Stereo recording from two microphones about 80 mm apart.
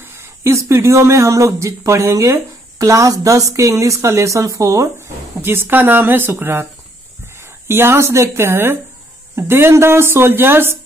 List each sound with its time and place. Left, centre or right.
0.0 s speech: right